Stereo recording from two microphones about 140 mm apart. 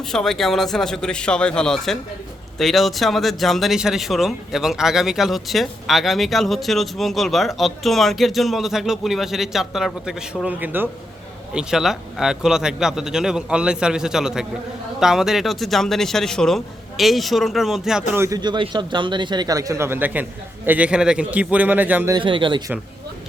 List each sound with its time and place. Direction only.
0.0 s speech: 5° left (ahead or behind)
18.1 s a man's voice: 20° right (ahead or behind)
18.3 s a man's voice: 35° right (ahead or behind); by 22.1 s 10° right (ahead or behind)
22.1 s a man's voice: 35° right (ahead or behind)